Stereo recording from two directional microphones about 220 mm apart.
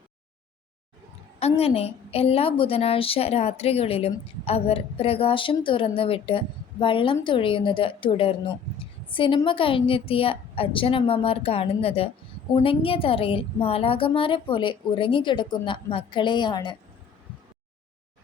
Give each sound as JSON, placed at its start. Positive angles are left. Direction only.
{"t": 1.4, "sound": "a woman's voice", "side_deg": 30}